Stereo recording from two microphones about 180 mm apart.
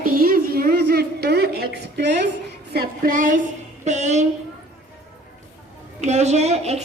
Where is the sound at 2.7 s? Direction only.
50° right (ahead or behind).